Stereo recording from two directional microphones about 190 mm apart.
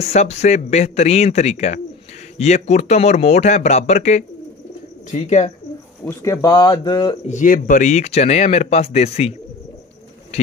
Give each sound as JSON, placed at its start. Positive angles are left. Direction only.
{"t": 0.0, "sound": "speech", "side_deg": 35}
{"t": 6.0, "sound": "speech", "side_deg": 15}
{"t": 7.2, "sound": "speech", "side_deg": 45}
{"t": 10.3, "sound": "a man's voice", "side_deg": 35}